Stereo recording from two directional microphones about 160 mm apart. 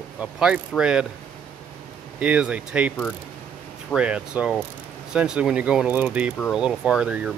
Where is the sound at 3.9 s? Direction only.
5° right (ahead or behind).